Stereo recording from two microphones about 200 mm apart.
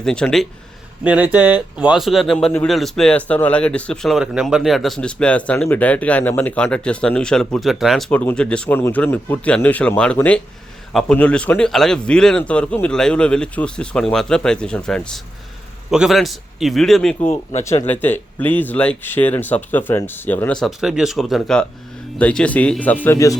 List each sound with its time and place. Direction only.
0.0 s speech: 5° left (ahead or behind)
1.0 s speech: 5° right (ahead or behind)
17.2 s speech: 35° left (ahead or behind)
17.8 s speech: 10° left (ahead or behind)